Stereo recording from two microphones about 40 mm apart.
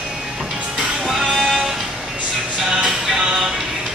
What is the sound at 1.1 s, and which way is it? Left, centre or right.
Music, centre.